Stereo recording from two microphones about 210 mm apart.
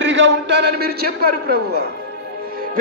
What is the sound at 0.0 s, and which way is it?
A man's voice, 55° right (ahead or behind).